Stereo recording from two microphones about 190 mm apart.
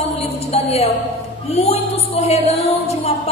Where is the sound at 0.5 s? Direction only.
30° left (ahead or behind).